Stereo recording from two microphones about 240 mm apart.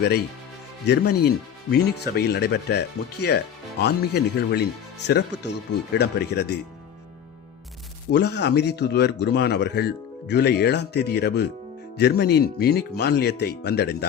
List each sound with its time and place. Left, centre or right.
0.9 s speech: left
8.1 s speech: left